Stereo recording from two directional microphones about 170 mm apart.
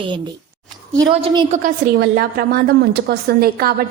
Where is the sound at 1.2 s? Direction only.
30° right (ahead or behind).